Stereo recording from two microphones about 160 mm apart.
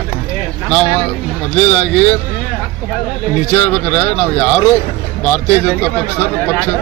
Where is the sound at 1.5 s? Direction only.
10° left (ahead or behind).